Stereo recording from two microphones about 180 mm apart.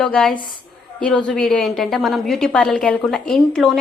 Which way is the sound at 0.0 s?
5° left (ahead or behind).